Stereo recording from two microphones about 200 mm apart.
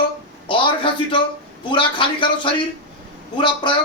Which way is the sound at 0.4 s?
25° left (ahead or behind).